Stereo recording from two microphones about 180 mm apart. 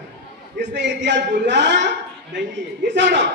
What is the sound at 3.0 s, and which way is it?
Speech, 75° right (ahead or behind).